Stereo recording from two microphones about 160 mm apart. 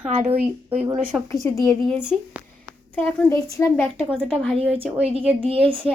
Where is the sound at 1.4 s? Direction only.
15° left (ahead or behind).